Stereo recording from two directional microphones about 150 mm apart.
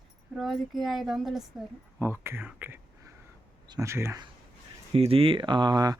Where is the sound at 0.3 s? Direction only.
Centre (ahead or behind).